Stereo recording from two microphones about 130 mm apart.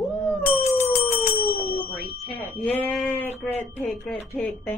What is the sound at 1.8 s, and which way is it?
Speech, 15° left (ahead or behind).